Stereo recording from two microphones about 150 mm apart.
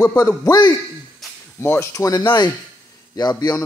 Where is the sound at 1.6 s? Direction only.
15° left (ahead or behind).